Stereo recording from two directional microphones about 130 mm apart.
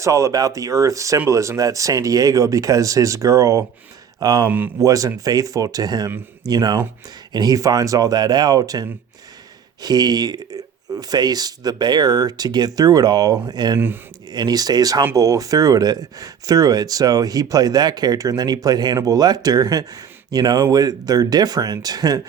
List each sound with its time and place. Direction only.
0.0 s speech: 25° right (ahead or behind)
4.4 s speech: 15° right (ahead or behind)
4.8 s speech: 25° right (ahead or behind)
13.7 s speech: 15° right (ahead or behind)
14.3 s speech: 30° right (ahead or behind)